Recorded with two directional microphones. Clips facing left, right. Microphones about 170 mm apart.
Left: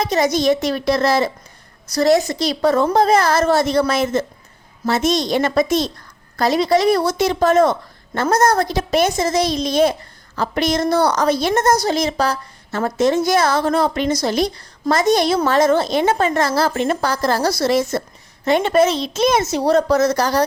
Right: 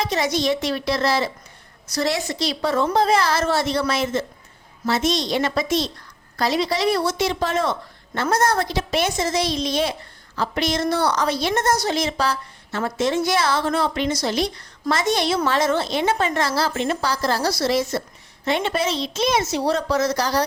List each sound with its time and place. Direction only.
0.0 s a woman's voice: 45° left (ahead or behind)